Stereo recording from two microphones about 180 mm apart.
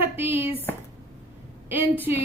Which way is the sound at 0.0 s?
10° right (ahead or behind).